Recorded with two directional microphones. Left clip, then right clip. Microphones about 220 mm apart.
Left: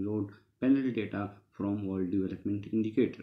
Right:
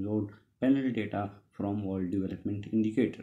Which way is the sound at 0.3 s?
30° right (ahead or behind).